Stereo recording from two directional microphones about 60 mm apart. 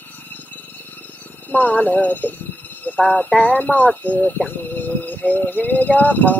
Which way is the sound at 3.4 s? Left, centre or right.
Left.